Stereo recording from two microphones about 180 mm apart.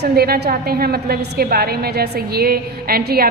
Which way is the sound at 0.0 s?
65° right (ahead or behind).